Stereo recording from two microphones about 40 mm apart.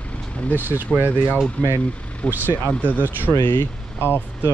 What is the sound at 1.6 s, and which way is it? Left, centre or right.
Speech, left.